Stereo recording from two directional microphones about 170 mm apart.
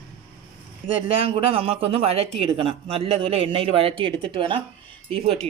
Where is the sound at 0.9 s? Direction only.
35° right (ahead or behind).